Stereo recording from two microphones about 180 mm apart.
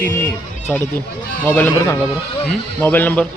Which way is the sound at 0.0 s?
10° left (ahead or behind).